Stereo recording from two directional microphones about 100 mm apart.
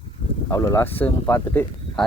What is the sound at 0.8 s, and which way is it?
Speech, 20° left (ahead or behind).